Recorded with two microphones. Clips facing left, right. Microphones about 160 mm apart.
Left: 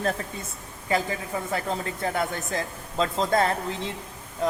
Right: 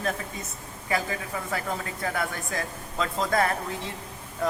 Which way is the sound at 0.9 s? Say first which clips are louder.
Left 3 dB; 25° left (ahead or behind).